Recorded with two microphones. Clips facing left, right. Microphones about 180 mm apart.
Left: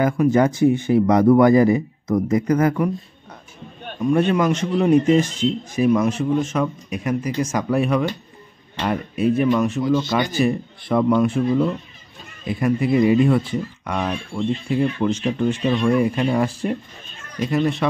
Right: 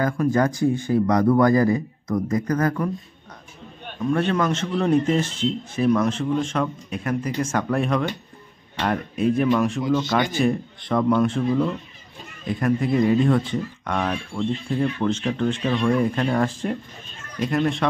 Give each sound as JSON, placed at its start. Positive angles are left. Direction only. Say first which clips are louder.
{"t": 0.0, "sound": "speech", "louder": "left 4 dB", "side_deg": 20}
{"t": 4.0, "sound": "speech", "louder": "left 4 dB", "side_deg": 15}